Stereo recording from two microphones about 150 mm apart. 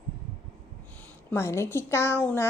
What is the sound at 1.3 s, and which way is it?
Speech, 15° left (ahead or behind).